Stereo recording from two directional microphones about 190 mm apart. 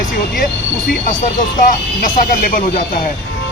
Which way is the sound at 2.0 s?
45° left (ahead or behind).